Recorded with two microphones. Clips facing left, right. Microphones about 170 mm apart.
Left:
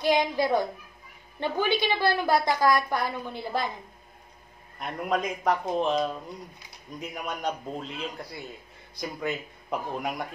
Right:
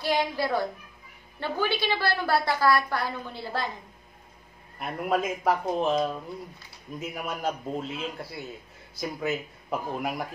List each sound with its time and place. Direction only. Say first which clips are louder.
0.0 s a woman's voice: left 3 dB; 20° left (ahead or behind)
4.7 s a man's voice: right 1 dB; 5° right (ahead or behind)